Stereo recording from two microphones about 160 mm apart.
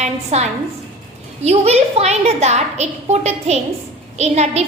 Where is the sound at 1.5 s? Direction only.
40° right (ahead or behind).